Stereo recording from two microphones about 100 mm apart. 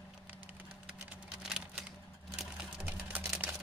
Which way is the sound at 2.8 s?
15° right (ahead or behind).